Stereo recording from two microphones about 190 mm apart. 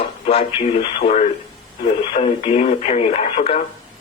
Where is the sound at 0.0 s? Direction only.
30° left (ahead or behind).